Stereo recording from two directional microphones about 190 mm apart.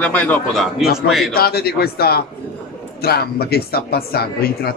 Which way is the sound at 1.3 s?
55° left (ahead or behind).